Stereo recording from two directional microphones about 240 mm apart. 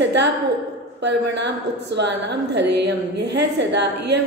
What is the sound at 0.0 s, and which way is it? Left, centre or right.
Speech, right.